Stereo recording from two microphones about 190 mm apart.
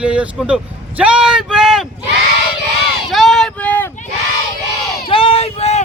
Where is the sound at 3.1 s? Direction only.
Centre (ahead or behind).